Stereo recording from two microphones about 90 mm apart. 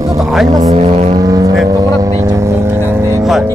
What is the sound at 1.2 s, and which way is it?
Vehicle, 45° right (ahead or behind).